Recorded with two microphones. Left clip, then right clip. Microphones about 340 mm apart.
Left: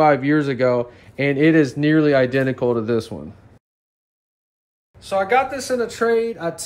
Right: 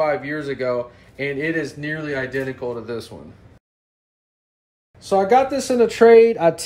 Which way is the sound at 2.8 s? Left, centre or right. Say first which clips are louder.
Left 8 dB; centre.